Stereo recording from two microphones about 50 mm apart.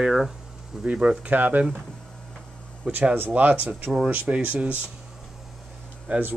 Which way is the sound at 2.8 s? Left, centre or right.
Right.